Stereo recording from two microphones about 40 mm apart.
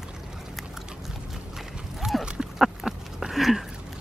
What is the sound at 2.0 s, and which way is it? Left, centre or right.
Horse, right.